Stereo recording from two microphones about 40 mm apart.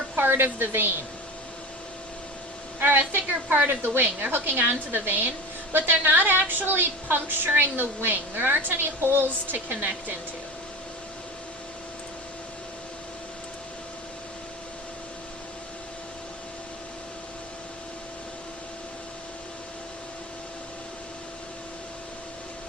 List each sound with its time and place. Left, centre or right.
0.2 s a woman's voice: right
2.8 s a woman's voice: right